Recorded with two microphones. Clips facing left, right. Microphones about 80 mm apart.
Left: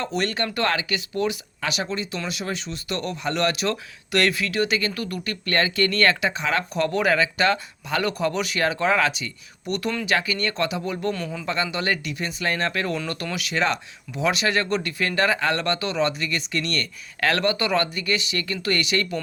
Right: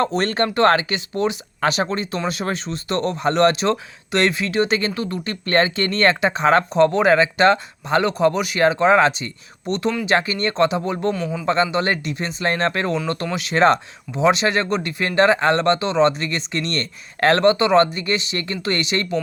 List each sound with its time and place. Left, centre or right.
0.0 s speech: right
11.1 s a man's voice: centre
11.4 s speech: right